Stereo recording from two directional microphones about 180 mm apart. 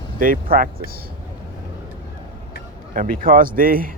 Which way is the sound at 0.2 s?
50° right (ahead or behind).